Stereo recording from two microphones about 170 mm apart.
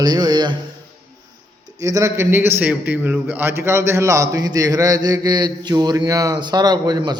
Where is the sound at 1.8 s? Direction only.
20° right (ahead or behind).